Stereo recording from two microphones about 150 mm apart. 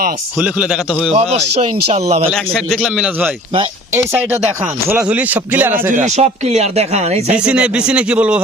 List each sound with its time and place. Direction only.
0.3 s a man's voice: 5° right (ahead or behind)
0.9 s a man's voice: 5° left (ahead or behind)
1.1 s speech: 45° right (ahead or behind)
2.3 s a man's voice: 5° left (ahead or behind); by 5.9 s 15° right (ahead or behind)
6.1 s speech: 50° right (ahead or behind)
7.3 s speech: 5° right (ahead or behind)